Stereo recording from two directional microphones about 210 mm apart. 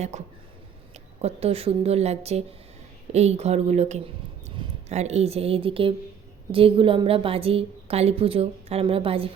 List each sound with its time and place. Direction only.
0.9 s a woman's voice: 30° right (ahead or behind)